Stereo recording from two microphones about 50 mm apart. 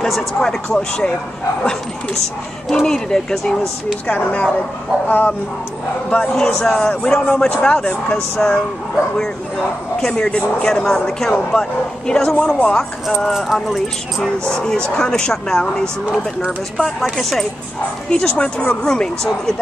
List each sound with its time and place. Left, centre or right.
0.0 s speech: centre
0.4 s speech: centre
2.7 s speech: centre
4.1 s speech: left
6.0 s speech: left
10.0 s speech: centre
13.3 s speech: centre
14.5 s speech: centre
17.2 s speech: centre
18.1 s speech: left